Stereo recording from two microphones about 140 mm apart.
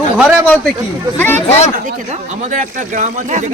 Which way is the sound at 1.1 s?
15° left (ahead or behind).